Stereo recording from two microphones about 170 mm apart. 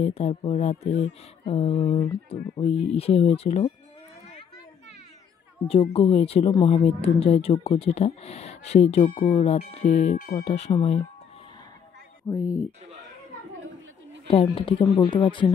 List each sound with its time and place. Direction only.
0.0 s speech: 40° left (ahead or behind)
5.7 s speech: 35° left (ahead or behind); by 10.4 s 50° left (ahead or behind)
10.4 s speech: 35° left (ahead or behind)
12.3 s speech: 20° left (ahead or behind)
14.2 s speech: 35° left (ahead or behind)